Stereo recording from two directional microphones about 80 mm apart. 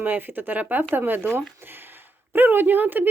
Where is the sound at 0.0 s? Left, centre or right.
Right.